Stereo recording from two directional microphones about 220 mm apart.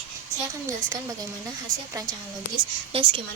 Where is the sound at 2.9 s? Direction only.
25° right (ahead or behind).